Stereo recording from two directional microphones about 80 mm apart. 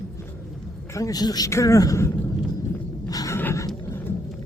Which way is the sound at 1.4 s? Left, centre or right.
Left.